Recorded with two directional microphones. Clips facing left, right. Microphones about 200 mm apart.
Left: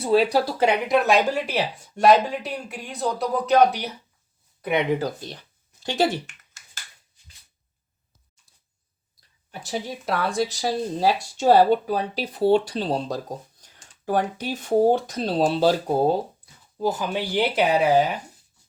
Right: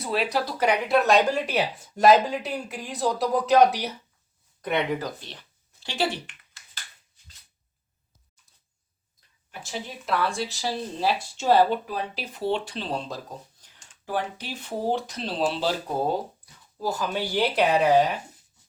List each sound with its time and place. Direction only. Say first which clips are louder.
0.0 s speech: left 7 dB; 30° left (ahead or behind)
0.9 s speech: right 1 dB; 5° left (ahead or behind)
4.6 s speech: left 3 dB; 15° left (ahead or behind)
4.9 s speech: left 5 dB; 30° left (ahead or behind)
5.2 s a sound: left 7 dB; 45° left (ahead or behind)
9.5 s speech: left 5 dB; 40° left (ahead or behind)
16.7 s speech: left 3 dB; 20° left (ahead or behind)